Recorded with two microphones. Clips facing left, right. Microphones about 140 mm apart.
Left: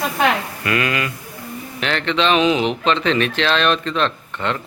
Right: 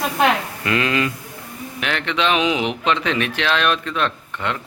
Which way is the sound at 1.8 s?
10° right (ahead or behind).